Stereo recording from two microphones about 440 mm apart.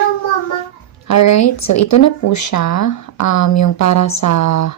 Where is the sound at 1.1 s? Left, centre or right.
Left.